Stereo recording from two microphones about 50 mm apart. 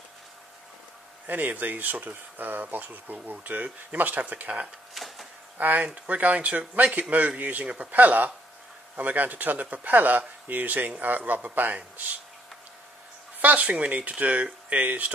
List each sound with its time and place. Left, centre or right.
1.2 s speech: right
4.9 s a sound: centre
5.6 s speech: right
13.4 s speech: right